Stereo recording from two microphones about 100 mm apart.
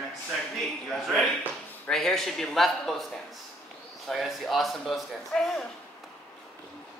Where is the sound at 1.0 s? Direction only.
Centre (ahead or behind).